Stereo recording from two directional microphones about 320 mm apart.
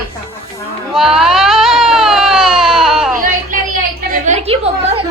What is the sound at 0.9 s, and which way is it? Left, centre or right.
Baby cry, centre.